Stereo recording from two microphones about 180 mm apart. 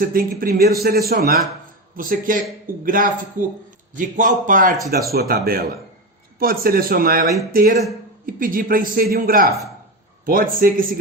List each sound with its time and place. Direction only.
0.0 s a man's voice: 55° right (ahead or behind)